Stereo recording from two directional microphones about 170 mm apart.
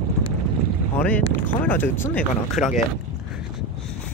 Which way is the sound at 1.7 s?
10° left (ahead or behind).